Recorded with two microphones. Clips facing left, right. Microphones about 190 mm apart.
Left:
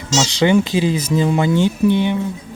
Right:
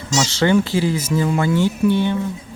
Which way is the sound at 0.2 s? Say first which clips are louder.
Left 2 dB; 15° left (ahead or behind).